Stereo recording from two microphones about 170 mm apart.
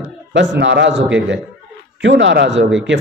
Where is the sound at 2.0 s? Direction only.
90° right.